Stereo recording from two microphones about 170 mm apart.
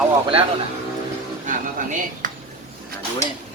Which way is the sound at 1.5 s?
50° right (ahead or behind).